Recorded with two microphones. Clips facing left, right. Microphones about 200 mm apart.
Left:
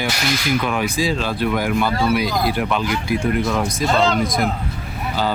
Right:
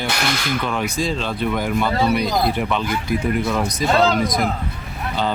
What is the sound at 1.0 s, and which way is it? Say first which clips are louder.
Speech: left 2 dB; 5° left (ahead or behind).